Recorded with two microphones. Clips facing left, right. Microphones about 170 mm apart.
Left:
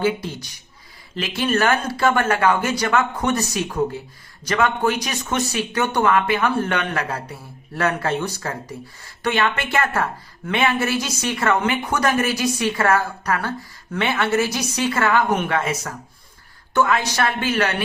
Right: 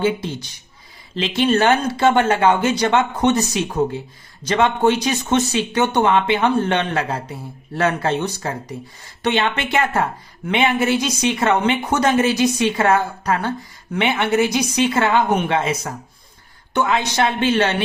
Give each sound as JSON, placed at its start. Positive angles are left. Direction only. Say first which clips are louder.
{"t": 0.0, "sound": "speech", "louder": "right 2 dB", "side_deg": -25}